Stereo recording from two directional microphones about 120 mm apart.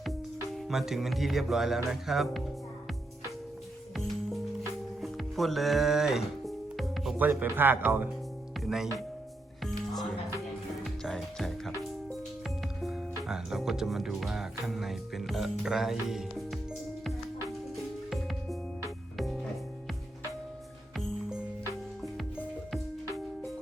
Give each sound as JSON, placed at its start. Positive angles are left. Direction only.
{"t": 0.0, "sound": "music", "side_deg": 0}
{"t": 1.9, "sound": "speech", "side_deg": 0}
{"t": 4.9, "sound": "music", "side_deg": 0}
{"t": 7.2, "sound": "speech", "side_deg": -15}
{"t": 8.6, "sound": "speech", "side_deg": 0}
{"t": 10.8, "sound": "music", "side_deg": 0}
{"t": 12.8, "sound": "speech", "side_deg": -5}
{"t": 18.1, "sound": "music", "side_deg": 0}